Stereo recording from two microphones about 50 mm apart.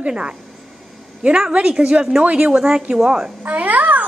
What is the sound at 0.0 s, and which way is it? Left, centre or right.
A child's voice, centre.